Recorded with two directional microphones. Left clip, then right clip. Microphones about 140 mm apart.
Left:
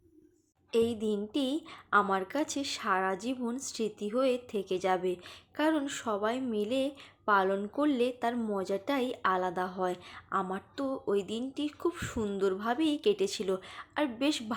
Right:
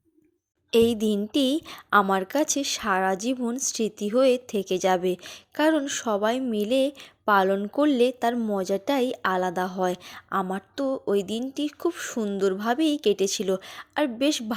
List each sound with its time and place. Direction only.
0.7 s a woman's voice: 70° right (ahead or behind); by 14.5 s 45° right (ahead or behind)